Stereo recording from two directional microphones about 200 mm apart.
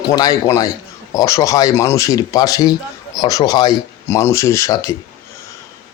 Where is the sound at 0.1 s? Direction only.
15° left (ahead or behind).